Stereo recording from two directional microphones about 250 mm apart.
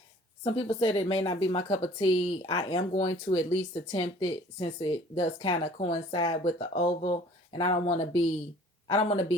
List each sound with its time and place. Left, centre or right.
0.7 s speech: left